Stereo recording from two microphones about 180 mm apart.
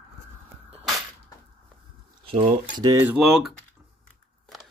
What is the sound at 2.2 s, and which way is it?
Speech, 30° right (ahead or behind).